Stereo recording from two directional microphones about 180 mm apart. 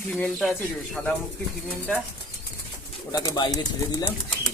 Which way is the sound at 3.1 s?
20° left (ahead or behind).